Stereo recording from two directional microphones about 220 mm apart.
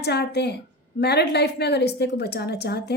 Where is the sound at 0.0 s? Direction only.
50° left (ahead or behind).